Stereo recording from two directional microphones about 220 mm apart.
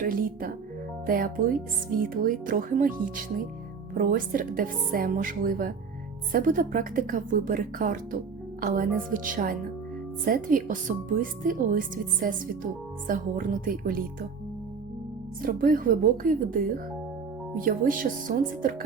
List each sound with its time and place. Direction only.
0.0 s speech: 40° right (ahead or behind)
15.4 s speech: 40° right (ahead or behind)